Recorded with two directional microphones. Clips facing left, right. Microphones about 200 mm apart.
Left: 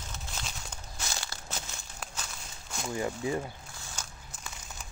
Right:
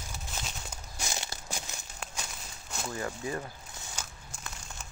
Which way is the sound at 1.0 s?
20° right (ahead or behind).